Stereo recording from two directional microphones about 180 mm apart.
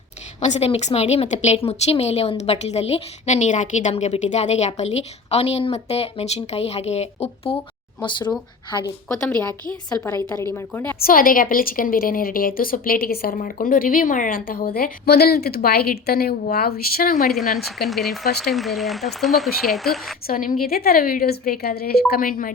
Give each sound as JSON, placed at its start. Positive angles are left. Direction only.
{"t": 0.3, "sound": "a woman's voice", "side_deg": 40}
{"t": 8.7, "sound": "a woman's voice", "side_deg": 20}
{"t": 9.0, "sound": "a woman's voice", "side_deg": 5}
{"t": 11.0, "sound": "a woman's voice", "side_deg": 50}
{"t": 17.7, "sound": "a woman's voice", "side_deg": 0}
{"t": 20.2, "sound": "a woman's voice", "side_deg": 50}